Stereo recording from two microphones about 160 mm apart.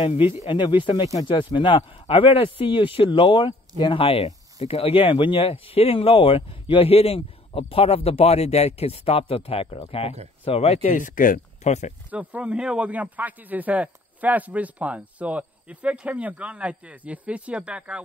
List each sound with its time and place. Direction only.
0.0 s speech: 35° left (ahead or behind)
12.1 s speech: 10° right (ahead or behind)